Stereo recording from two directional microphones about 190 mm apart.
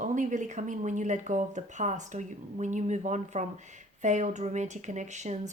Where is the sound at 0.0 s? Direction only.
40° right (ahead or behind).